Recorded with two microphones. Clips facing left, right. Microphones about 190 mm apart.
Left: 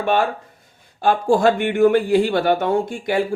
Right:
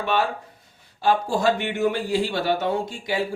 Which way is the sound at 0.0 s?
50° left (ahead or behind).